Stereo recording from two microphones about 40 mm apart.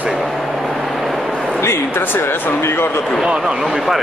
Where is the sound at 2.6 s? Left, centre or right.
Left.